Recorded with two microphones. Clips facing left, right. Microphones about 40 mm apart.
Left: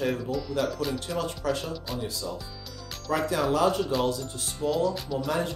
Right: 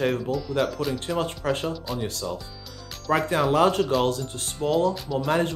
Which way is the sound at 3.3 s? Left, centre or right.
Right.